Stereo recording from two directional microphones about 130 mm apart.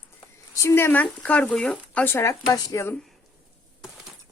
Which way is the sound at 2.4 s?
30° left (ahead or behind).